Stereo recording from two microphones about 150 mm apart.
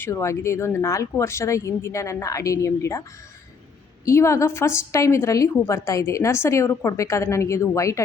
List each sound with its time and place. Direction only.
0.0 s a woman's voice: 20° left (ahead or behind)
4.0 s a woman's voice: 20° left (ahead or behind)